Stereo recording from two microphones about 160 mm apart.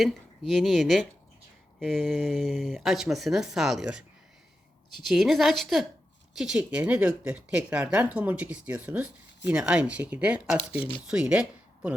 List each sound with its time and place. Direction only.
0.0 s speech: centre (ahead or behind)
10.6 s speech: 35° left (ahead or behind)
11.0 s speech: 5° right (ahead or behind)